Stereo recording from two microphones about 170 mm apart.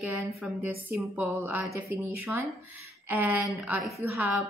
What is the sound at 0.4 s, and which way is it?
Speech, 10° right (ahead or behind).